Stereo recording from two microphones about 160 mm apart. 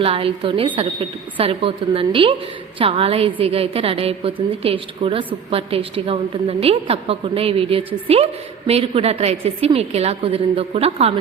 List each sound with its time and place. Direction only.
0.0 s a woman's voice: 35° right (ahead or behind)